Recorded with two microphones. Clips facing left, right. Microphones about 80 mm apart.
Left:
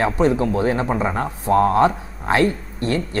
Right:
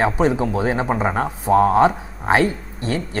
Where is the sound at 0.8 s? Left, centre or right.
Right.